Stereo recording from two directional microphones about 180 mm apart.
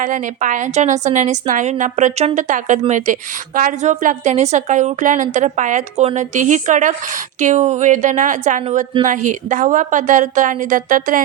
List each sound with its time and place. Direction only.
0.0 s a woman's voice: 45° right (ahead or behind)